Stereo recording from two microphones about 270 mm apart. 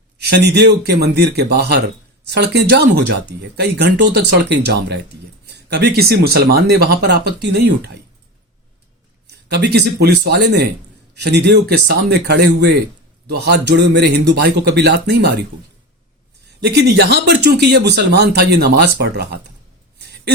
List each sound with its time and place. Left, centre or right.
0.2 s speech: right
9.3 s speech: right
16.6 s speech: right
20.0 s a sound: right